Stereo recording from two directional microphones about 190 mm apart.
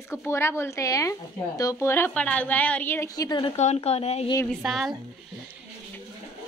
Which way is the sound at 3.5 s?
35° left (ahead or behind).